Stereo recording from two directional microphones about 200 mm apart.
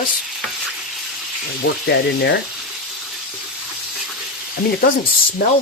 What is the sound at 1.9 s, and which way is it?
Speech, 55° left (ahead or behind).